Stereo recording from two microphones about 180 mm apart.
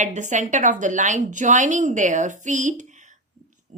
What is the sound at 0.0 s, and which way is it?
A woman's voice, 45° right (ahead or behind).